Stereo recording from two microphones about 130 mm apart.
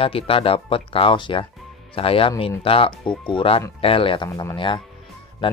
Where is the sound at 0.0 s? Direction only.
45° left (ahead or behind).